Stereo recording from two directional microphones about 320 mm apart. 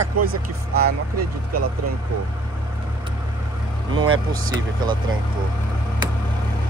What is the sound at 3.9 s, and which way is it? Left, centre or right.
Speech, right.